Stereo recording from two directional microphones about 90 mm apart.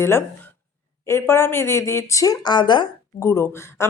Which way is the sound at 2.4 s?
55° left (ahead or behind).